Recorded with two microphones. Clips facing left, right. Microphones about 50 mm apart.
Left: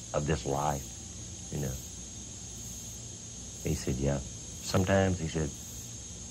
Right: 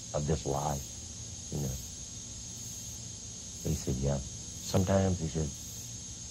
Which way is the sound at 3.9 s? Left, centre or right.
Left.